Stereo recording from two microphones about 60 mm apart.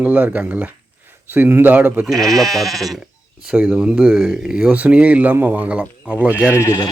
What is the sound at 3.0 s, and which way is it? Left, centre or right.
Speech, centre.